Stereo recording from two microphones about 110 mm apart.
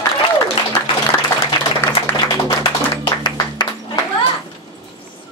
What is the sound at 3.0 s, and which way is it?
Music, 45° left (ahead or behind).